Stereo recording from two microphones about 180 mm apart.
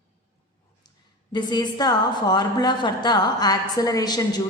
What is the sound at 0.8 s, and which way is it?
A woman's voice, 25° left (ahead or behind).